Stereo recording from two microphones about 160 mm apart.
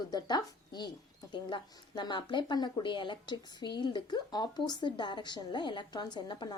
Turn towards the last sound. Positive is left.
turn(degrees=30)  # may be behind; listen again after turning